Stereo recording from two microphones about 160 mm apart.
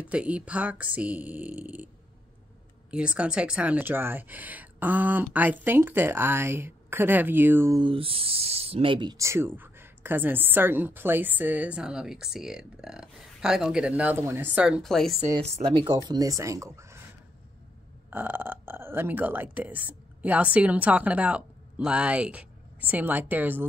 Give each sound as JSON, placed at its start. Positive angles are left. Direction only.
{"t": 0.0, "sound": "speech", "side_deg": -10}
{"t": 2.9, "sound": "speech", "side_deg": -5}
{"t": 7.8, "sound": "speech", "side_deg": -35}
{"t": 15.3, "sound": "speech", "side_deg": -40}
{"t": 18.1, "sound": "speech", "side_deg": -10}